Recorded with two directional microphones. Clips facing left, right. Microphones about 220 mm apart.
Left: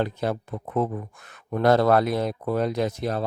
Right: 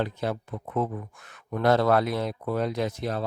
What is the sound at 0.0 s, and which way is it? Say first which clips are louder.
Speech: left 3 dB; 45° left (ahead or behind).